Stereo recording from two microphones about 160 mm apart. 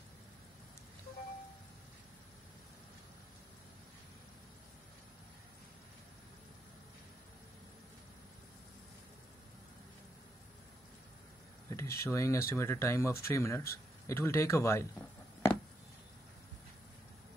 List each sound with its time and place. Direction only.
11.7 s speech: 15° left (ahead or behind)